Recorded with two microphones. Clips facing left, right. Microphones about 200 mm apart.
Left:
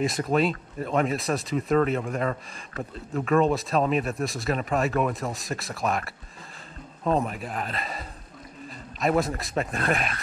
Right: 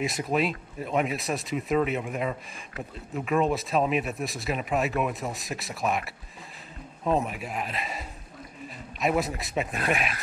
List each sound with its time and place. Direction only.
0.0 s speech: centre (ahead or behind)
9.0 s speech: centre (ahead or behind)